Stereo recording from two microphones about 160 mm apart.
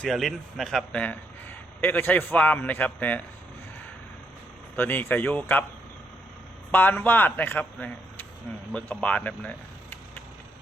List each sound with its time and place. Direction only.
0.0 s a man's voice: centre (ahead or behind)
4.8 s a man's voice: 10° left (ahead or behind)
6.7 s a man's voice: 10° left (ahead or behind)